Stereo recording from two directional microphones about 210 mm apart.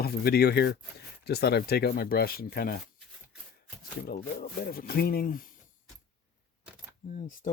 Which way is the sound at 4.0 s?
45° left (ahead or behind).